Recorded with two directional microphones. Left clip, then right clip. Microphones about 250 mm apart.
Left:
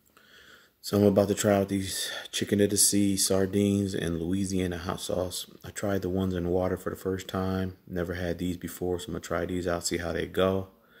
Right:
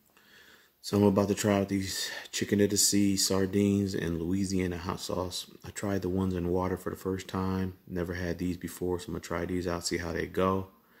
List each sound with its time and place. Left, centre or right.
0.8 s speech: centre